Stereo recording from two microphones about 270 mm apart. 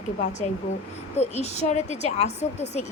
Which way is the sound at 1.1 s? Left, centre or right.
Left.